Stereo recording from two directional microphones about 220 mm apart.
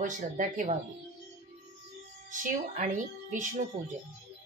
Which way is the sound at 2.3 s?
35° right (ahead or behind).